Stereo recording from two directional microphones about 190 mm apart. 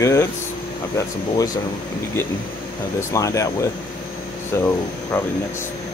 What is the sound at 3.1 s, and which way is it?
Speech, 15° left (ahead or behind).